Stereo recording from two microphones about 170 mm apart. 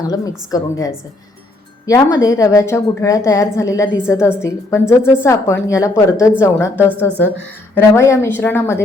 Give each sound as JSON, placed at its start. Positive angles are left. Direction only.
{"t": 0.1, "sound": "a woman's voice", "side_deg": 20}